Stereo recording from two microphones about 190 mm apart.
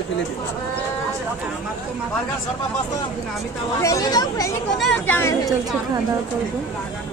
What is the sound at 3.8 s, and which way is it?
Speech, 20° left (ahead or behind).